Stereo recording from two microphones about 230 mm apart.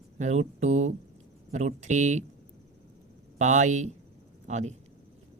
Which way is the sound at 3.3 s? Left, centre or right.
Right.